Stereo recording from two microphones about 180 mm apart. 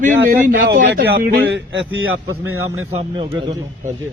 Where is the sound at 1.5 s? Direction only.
85° right.